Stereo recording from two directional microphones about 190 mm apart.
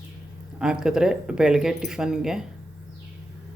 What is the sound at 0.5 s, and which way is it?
Speech, 5° right (ahead or behind).